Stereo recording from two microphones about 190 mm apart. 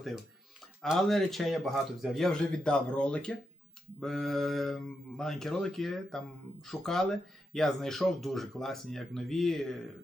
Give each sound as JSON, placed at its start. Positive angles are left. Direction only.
{"t": 0.8, "sound": "speech", "side_deg": 0}